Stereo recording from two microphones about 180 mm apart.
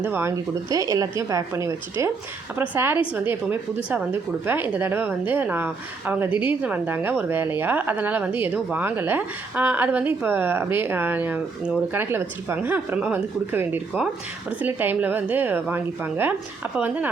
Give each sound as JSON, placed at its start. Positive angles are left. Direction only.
{"t": 0.0, "sound": "a woman's voice", "side_deg": -10}